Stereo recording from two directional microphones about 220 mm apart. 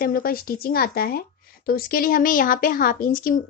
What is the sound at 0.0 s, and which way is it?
Speech, 40° left (ahead or behind).